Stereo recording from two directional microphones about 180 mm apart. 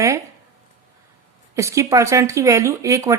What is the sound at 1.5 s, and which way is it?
Speech, 15° right (ahead or behind).